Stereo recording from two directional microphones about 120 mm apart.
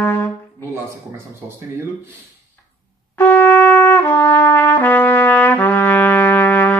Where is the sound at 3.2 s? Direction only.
15° left (ahead or behind).